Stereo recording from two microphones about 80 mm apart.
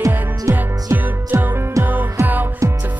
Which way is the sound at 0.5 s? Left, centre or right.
Right.